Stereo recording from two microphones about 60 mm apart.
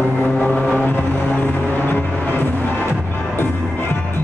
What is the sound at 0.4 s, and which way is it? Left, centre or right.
Vehicle, left.